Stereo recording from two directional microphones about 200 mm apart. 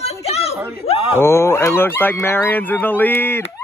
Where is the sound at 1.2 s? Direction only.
15° left (ahead or behind).